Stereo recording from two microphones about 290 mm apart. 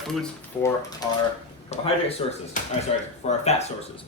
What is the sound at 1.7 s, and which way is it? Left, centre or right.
Speech, left.